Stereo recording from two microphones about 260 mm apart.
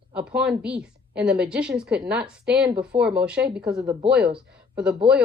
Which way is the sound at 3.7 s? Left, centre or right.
Centre.